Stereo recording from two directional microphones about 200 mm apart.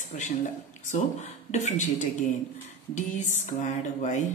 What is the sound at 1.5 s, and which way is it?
Speech, 35° left (ahead or behind).